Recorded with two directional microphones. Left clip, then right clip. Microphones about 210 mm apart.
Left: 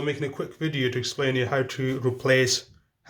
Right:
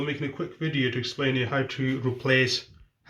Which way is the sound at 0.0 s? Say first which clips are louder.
Left 2 dB; 55° left (ahead or behind).